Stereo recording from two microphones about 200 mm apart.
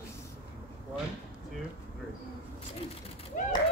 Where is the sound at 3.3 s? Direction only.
40° left (ahead or behind).